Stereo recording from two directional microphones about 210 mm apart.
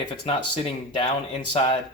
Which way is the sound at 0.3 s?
20° left (ahead or behind).